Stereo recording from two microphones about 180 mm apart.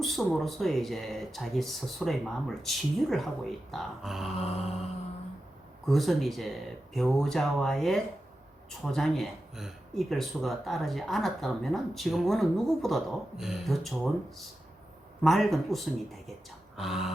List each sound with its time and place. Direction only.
0.0 s speech: centre (ahead or behind)
4.4 s mantra: 35° left (ahead or behind)
5.8 s speech: centre (ahead or behind)
16.7 s a sound: centre (ahead or behind)